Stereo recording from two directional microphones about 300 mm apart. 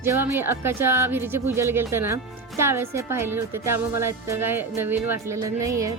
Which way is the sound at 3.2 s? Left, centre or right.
Right.